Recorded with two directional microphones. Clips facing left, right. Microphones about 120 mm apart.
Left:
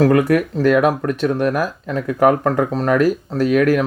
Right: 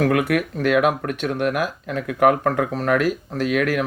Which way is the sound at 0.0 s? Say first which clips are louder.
Left 5 dB; 30° left (ahead or behind).